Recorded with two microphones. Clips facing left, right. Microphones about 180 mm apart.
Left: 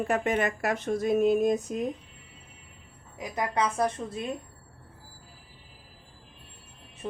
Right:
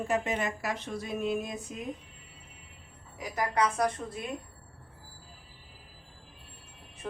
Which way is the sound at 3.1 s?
25° left (ahead or behind).